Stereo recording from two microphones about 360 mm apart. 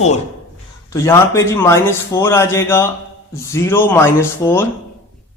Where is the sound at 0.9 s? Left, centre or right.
Centre.